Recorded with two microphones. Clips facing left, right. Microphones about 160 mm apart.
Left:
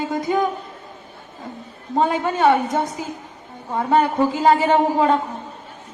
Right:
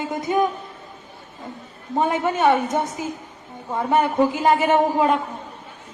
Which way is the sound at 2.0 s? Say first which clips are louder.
Left 1 dB; 20° right (ahead or behind).